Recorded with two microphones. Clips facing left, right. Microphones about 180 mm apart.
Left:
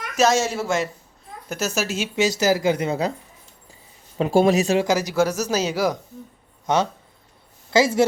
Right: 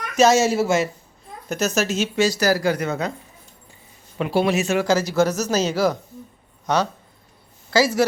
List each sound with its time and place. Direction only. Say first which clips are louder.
0.2 s speech: right 4 dB; 5° right (ahead or behind)
1.5 s speech: right 3 dB; 5° left (ahead or behind); by 3.1 s 30° left (ahead or behind)
4.2 s speech: left 3 dB; 45° left (ahead or behind)
4.9 s speech: right 1 dB; 15° left (ahead or behind)
6.7 s speech: even; 25° left (ahead or behind)